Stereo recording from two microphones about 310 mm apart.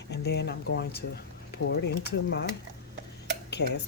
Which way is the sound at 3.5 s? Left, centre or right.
Left.